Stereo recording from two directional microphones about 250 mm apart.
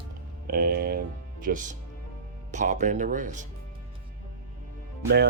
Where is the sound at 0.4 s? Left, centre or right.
Right.